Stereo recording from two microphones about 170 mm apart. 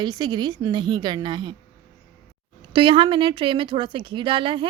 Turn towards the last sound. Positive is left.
turn(degrees=-30)  # may be behind; listen again after turning